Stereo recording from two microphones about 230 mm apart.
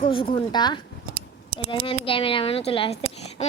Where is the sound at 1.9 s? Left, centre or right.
Left.